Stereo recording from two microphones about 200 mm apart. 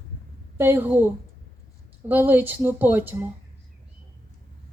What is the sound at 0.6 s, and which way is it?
Speech, 10° right (ahead or behind).